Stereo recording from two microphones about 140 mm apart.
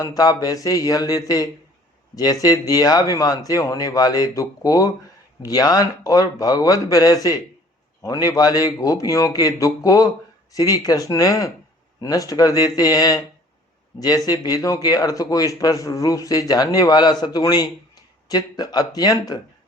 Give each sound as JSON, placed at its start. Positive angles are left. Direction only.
{"t": 0.0, "sound": "a man's voice", "side_deg": 25}
{"t": 14.3, "sound": "a man's voice", "side_deg": 25}